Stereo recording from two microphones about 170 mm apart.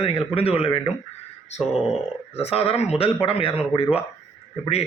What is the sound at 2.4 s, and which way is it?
A man's voice, 35° left (ahead or behind).